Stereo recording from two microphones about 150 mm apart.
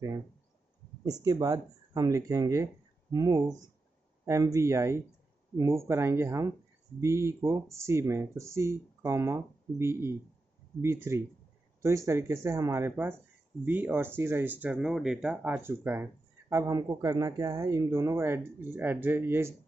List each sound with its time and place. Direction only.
1.2 s speech: 25° right (ahead or behind)